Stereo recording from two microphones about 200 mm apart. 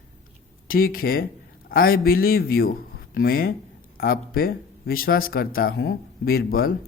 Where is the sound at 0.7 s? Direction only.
45° left (ahead or behind).